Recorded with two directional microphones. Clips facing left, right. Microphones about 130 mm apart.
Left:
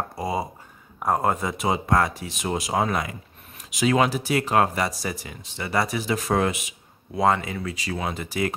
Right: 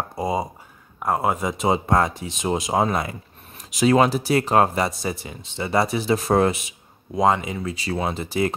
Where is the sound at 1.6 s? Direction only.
25° right (ahead or behind).